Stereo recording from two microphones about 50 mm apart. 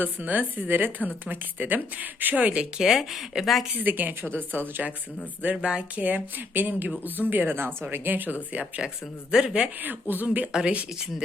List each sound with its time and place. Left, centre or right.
0.0 s a woman's voice: right
2.7 s speech: centre
3.8 s a woman's voice: right
6.0 s a woman's voice: right
9.3 s a woman's voice: centre
9.8 s a woman's voice: right
10.5 s a woman's voice: centre